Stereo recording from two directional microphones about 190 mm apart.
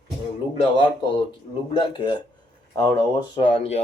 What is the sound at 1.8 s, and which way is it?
Speech, 25° left (ahead or behind).